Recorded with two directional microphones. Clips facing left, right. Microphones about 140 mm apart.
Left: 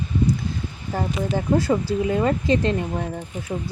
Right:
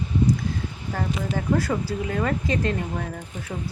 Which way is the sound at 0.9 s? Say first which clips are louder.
Left 3 dB; 30° left (ahead or behind).